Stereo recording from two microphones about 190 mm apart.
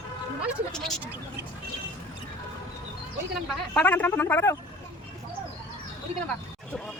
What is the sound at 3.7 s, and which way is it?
Speech, 10° left (ahead or behind).